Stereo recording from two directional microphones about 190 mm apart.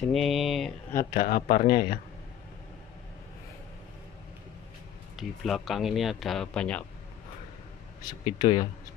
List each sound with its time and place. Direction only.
0.1 s speech: centre (ahead or behind)
1.1 s speech: 50° left (ahead or behind)
5.1 s speech: centre (ahead or behind)
8.0 s speech: 20° left (ahead or behind)